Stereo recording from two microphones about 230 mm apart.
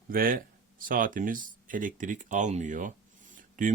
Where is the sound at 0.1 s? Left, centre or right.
Right.